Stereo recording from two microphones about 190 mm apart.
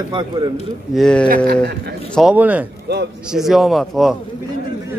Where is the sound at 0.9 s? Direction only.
5° left (ahead or behind).